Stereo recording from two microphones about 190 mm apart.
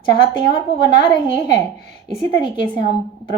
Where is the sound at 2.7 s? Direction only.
40° right (ahead or behind).